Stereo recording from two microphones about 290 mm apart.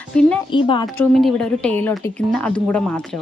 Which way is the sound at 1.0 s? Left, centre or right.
Centre.